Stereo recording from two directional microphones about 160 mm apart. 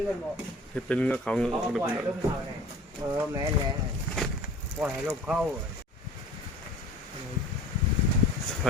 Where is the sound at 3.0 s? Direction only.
20° right (ahead or behind).